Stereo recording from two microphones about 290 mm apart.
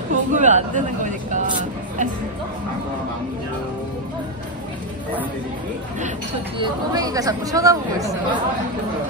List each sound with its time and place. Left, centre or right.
0.3 s speech: right
6.6 s speech: centre